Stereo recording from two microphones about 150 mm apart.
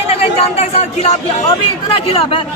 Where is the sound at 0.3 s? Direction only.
45° left (ahead or behind).